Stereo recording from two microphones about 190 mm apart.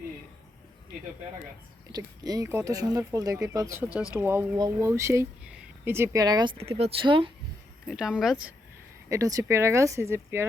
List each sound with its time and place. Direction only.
1.9 s speech: 20° right (ahead or behind)
7.9 s speech: 5° right (ahead or behind)
9.0 s speech: 15° right (ahead or behind)